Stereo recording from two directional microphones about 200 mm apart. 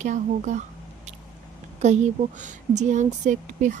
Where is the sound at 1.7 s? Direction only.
35° right (ahead or behind).